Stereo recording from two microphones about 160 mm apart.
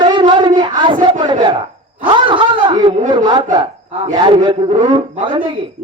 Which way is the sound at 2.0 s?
30° right (ahead or behind).